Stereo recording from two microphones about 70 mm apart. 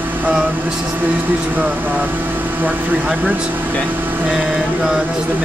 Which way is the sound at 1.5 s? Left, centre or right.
Right.